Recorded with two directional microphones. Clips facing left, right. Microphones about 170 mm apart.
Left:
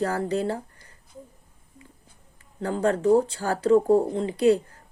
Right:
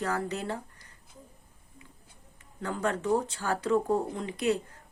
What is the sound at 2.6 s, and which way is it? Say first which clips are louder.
Speech: left 7 dB; 30° left (ahead or behind).